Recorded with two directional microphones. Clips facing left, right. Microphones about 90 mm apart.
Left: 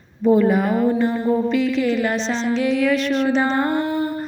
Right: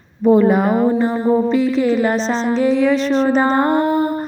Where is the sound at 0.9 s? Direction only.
35° right (ahead or behind).